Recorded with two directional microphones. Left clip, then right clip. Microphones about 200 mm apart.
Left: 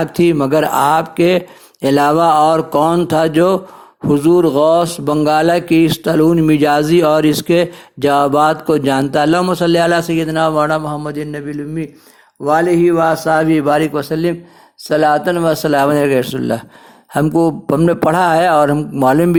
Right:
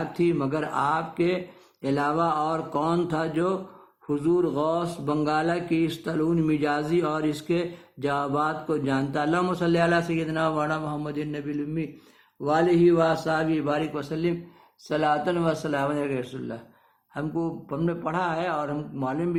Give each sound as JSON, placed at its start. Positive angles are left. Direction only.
{"t": 0.0, "sound": "a man's voice", "side_deg": 35}